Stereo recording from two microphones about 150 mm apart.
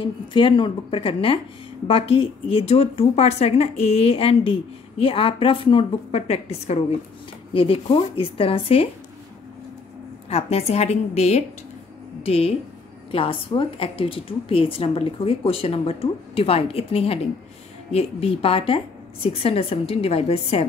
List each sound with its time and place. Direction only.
0.0 s speech: 35° left (ahead or behind)
10.3 s a woman's voice: 45° left (ahead or behind)